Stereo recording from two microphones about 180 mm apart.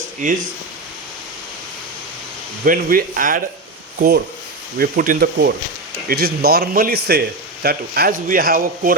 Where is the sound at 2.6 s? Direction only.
50° right (ahead or behind).